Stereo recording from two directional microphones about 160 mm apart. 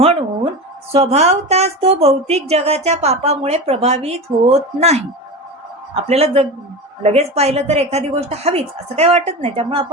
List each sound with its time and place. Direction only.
0.9 s a woman's voice: 40° right (ahead or behind)